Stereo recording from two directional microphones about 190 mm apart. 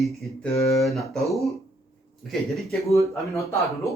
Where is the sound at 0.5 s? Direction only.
15° left (ahead or behind).